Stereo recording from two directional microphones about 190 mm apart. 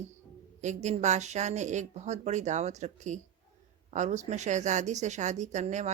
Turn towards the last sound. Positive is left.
turn(degrees=-40)  # may be behind; listen again after turning